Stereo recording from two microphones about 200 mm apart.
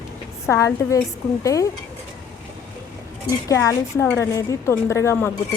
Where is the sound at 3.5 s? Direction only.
15° left (ahead or behind).